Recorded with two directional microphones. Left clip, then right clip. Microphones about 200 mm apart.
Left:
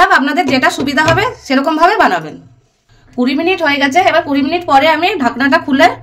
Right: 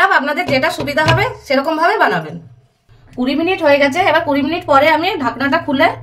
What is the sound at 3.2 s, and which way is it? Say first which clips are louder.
A woman's voice: left 1 dB; 60° left (ahead or behind).